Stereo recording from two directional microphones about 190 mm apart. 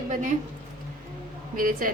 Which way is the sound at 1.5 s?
45° right (ahead or behind).